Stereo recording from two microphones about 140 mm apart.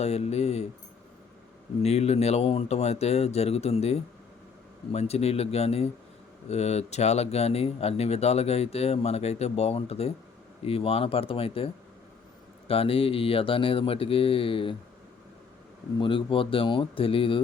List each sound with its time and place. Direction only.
0.0 s speech: 50° left (ahead or behind)
1.8 s speech: 50° left (ahead or behind)
16.0 s speech: 35° left (ahead or behind)